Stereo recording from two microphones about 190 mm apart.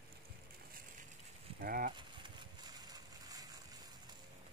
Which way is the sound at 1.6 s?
50° right (ahead or behind).